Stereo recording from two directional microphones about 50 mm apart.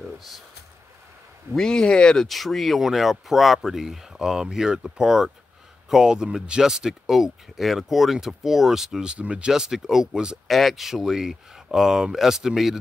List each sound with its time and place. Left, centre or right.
1.6 s speech: centre
2.2 s speech: centre
9.1 s speech: right
9.5 s speech: centre
10.5 s speech: centre